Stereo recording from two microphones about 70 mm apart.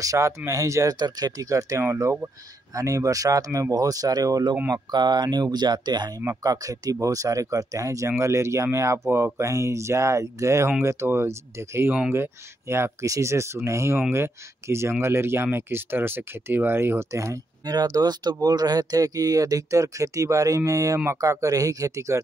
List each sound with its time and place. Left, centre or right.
0.0 s speech: right
0.9 s speech: right
4.9 s speech: right
6.4 s speech: right
13.0 s speech: right
17.6 s speech: right